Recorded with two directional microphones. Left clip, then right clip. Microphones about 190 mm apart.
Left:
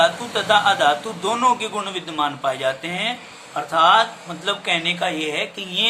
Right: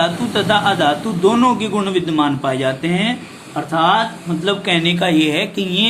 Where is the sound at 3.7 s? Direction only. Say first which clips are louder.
Even; 5° right (ahead or behind).